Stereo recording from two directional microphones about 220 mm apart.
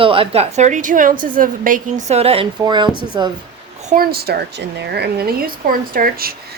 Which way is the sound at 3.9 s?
45° right (ahead or behind).